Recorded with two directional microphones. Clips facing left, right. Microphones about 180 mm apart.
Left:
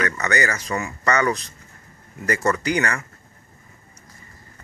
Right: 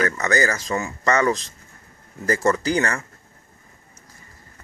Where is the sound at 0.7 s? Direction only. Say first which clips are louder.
Right 1 dB; 25° right (ahead or behind).